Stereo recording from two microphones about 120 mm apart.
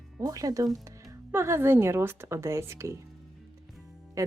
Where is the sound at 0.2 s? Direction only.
30° right (ahead or behind).